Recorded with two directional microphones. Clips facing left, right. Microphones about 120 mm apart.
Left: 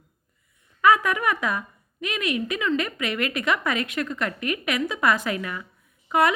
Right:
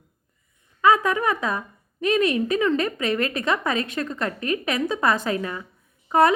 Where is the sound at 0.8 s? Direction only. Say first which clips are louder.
Right 1 dB; 25° right (ahead or behind).